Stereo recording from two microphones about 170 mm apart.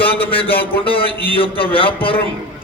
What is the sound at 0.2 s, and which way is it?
A man's voice, 35° left (ahead or behind).